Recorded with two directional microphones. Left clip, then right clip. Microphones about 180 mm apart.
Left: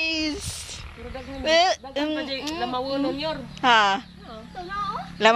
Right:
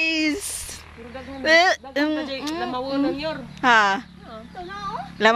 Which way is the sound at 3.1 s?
5° left (ahead or behind).